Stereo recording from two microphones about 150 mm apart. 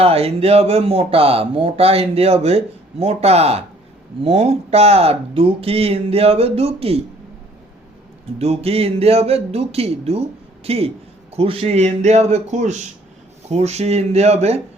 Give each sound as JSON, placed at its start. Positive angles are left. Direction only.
{"t": 0.0, "sound": "speech", "side_deg": -40}
{"t": 8.4, "sound": "speech", "side_deg": -45}